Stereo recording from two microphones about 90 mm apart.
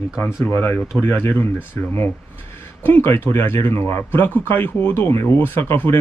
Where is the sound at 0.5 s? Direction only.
20° left (ahead or behind).